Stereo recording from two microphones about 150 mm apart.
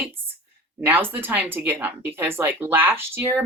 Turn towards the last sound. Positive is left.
turn(degrees=-15)  # may be behind; listen again after turning